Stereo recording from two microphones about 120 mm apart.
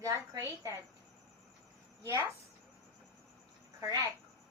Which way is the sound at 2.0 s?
25° right (ahead or behind).